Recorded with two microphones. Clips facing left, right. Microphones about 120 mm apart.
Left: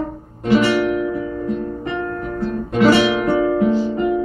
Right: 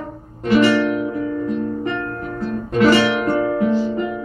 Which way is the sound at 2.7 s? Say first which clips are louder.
Left 1 dB; 20° left (ahead or behind).